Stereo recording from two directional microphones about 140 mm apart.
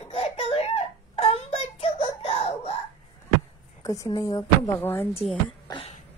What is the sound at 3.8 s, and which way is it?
Speech, 25° left (ahead or behind).